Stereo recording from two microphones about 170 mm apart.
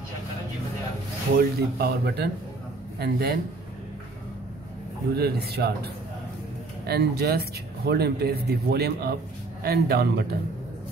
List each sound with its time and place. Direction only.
1.3 s speech: 70° right (ahead or behind)
5.1 s speech: 65° right (ahead or behind)
6.9 s speech: 70° right (ahead or behind)